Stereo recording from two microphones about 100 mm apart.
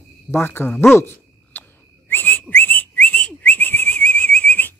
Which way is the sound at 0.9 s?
25° left (ahead or behind).